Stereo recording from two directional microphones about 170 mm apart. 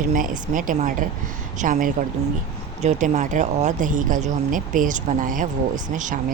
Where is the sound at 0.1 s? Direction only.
55° right (ahead or behind).